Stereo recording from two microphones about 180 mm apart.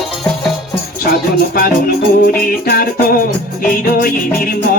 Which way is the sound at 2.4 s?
55° left (ahead or behind).